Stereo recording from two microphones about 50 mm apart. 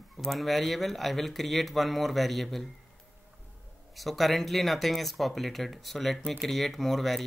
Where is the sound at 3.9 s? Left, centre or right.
Centre.